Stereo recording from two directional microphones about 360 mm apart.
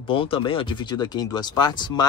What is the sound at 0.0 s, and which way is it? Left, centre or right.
Speech, centre.